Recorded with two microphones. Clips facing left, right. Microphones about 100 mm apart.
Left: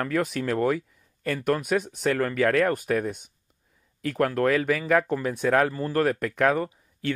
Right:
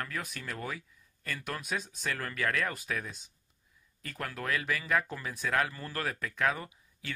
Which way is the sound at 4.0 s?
80° left.